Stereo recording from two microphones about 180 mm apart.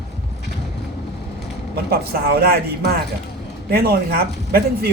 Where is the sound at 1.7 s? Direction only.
60° right (ahead or behind).